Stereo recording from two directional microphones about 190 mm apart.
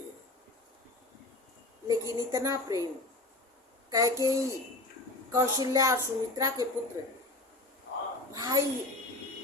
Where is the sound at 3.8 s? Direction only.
20° right (ahead or behind).